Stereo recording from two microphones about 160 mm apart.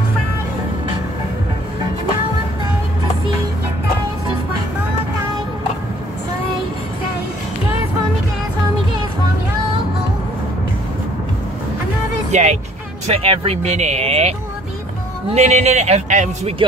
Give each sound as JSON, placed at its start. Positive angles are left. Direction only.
{"t": 12.3, "sound": "music", "side_deg": -45}
{"t": 13.0, "sound": "a man's voice", "side_deg": -40}